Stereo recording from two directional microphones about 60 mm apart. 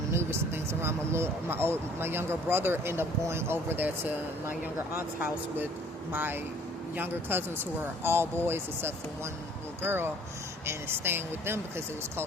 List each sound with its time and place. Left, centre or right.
0.1 s speech: right
6.1 s speech: right